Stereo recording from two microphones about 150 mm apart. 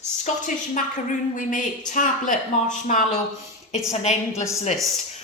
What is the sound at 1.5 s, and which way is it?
A woman's voice, 60° left (ahead or behind).